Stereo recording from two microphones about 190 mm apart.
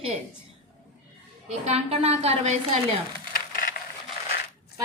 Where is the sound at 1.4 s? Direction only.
35° right (ahead or behind).